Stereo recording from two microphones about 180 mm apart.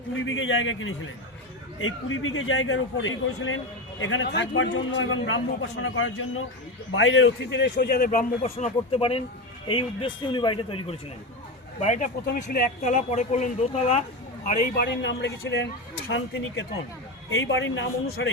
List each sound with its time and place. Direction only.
0.2 s a man's voice: 90° left; by 8.3 s 55° left (ahead or behind)
8.4 s speech: 35° left (ahead or behind)
11.8 s speech: 45° left (ahead or behind)
12.2 s speech: 60° left (ahead or behind)
12.8 s speech: 40° left (ahead or behind)
14.8 s a man's voice: 75° left (ahead or behind); by 15.6 s 90° left
17.3 s a man's voice: 90° left